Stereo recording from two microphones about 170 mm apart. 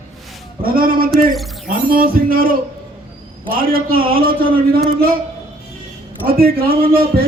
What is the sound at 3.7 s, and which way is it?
A man's voice, 60° right (ahead or behind).